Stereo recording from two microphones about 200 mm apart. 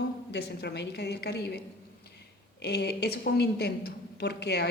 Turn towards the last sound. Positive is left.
turn(degrees=55)  # may be behind; listen again after turning